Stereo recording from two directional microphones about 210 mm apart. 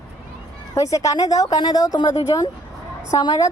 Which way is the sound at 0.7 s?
15° left (ahead or behind).